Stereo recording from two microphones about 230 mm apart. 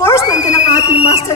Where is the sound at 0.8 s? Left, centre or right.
Left.